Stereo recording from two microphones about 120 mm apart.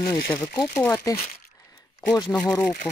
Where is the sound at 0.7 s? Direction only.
20° left (ahead or behind).